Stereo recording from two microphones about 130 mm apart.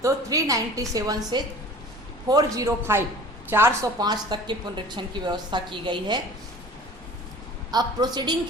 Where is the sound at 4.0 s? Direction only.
35° right (ahead or behind).